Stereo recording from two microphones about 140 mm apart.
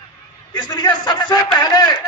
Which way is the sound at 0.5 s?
30° left (ahead or behind).